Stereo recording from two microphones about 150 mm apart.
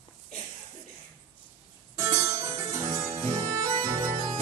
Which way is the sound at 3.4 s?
20° right (ahead or behind).